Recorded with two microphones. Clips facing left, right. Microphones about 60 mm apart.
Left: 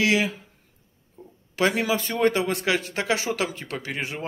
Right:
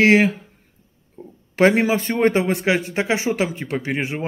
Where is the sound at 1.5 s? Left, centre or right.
Right.